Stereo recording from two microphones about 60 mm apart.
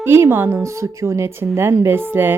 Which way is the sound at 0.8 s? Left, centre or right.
Right.